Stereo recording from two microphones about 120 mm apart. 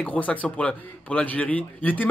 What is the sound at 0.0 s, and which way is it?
Speech, 10° left (ahead or behind).